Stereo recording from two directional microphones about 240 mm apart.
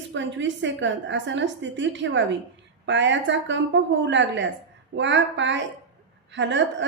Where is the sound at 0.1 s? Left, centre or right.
Right.